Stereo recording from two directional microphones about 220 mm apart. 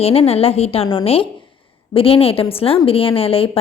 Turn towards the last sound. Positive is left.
turn(degrees=25)  # may be behind; listen again after turning